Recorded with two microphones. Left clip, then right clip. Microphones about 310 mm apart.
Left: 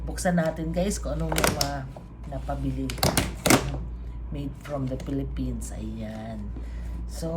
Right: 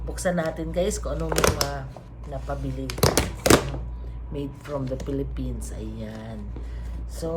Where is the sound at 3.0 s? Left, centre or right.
Centre.